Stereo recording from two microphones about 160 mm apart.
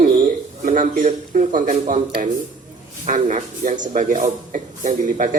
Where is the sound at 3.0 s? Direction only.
50° right (ahead or behind).